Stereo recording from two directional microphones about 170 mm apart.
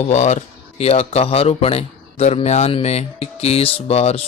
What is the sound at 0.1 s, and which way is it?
Speech, 40° left (ahead or behind).